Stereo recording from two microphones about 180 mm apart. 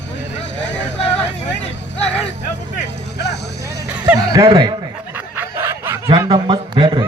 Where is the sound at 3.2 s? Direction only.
70° left (ahead or behind).